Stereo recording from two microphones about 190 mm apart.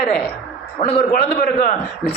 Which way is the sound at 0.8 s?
30° left (ahead or behind).